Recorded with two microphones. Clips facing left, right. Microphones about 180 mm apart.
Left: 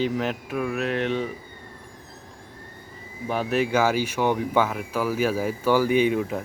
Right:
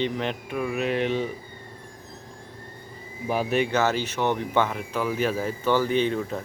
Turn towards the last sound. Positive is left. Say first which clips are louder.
# left 3 dB
turn(degrees=10)  # may be behind; listen again after turning